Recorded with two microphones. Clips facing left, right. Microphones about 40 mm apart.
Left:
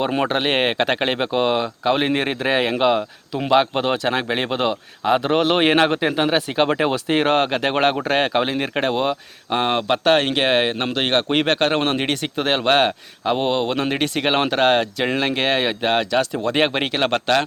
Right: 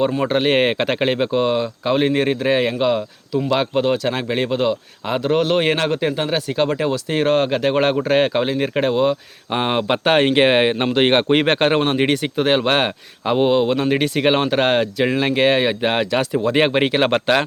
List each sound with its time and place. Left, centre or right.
0.3 s speech: centre